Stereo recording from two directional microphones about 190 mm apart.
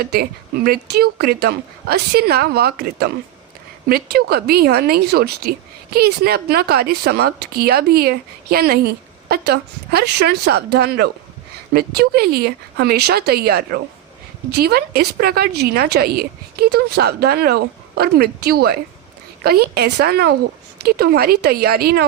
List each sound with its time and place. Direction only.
0.0 s a woman's voice: 55° right (ahead or behind)